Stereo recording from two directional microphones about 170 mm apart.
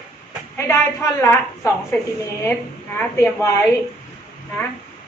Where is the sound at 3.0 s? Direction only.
15° left (ahead or behind).